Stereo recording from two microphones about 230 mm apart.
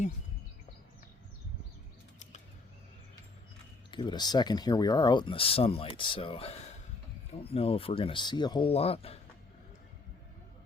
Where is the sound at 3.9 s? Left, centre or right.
Centre.